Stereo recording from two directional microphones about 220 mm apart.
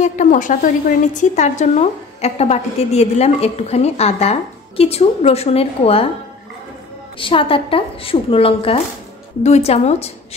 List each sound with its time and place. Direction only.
0.0 s a woman's voice: 35° left (ahead or behind)
7.2 s a woman's voice: 25° left (ahead or behind)